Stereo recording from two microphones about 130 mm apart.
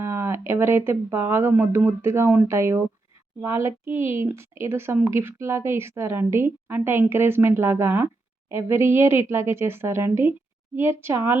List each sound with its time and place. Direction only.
0.0 s a woman's voice: 15° right (ahead or behind)